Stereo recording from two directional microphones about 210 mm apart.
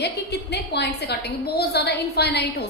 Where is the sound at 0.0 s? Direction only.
50° left (ahead or behind).